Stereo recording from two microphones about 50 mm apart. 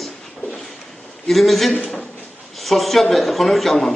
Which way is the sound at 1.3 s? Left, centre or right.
Centre.